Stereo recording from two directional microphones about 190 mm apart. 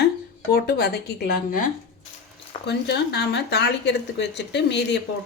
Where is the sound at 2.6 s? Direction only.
60° left (ahead or behind).